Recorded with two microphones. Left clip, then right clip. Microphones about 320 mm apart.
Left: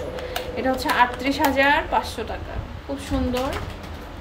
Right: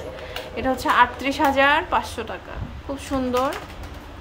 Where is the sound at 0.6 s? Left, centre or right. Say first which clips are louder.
Right 2 dB; centre.